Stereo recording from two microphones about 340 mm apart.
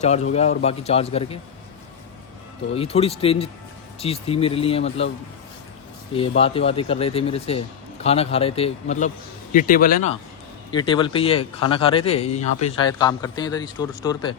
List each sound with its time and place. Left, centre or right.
0.0 s a man's voice: centre
2.7 s a man's voice: centre
6.1 s a man's voice: centre